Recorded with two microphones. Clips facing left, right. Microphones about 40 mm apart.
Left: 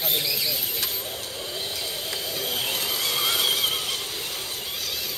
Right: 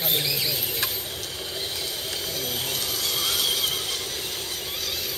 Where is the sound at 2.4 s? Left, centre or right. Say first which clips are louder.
Left 4 dB; left.